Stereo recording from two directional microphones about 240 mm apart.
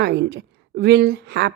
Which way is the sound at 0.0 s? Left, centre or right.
Right.